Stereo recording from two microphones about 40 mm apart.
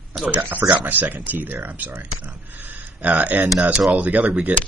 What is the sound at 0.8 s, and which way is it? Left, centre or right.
Speech, right.